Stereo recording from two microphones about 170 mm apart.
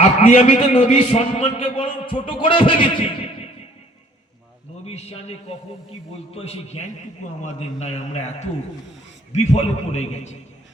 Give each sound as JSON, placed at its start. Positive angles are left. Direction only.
{"t": 0.0, "sound": "a man's voice", "side_deg": 35}
{"t": 4.9, "sound": "a man's voice", "side_deg": 40}